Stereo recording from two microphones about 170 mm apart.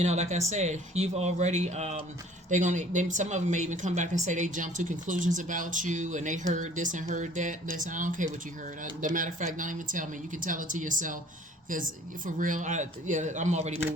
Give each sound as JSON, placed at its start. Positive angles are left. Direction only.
{"t": 0.0, "sound": "speech", "side_deg": -40}